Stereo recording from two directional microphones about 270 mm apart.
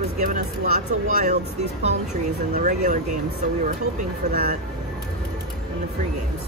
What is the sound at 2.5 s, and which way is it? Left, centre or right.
Speech, right.